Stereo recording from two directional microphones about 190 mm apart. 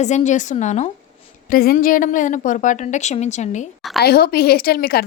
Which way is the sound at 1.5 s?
50° left (ahead or behind).